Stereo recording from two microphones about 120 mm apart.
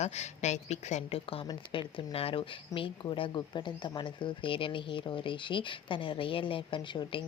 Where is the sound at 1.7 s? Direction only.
50° left (ahead or behind).